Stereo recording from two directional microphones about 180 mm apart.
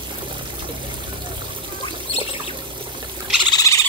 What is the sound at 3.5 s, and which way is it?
Owl, 20° left (ahead or behind).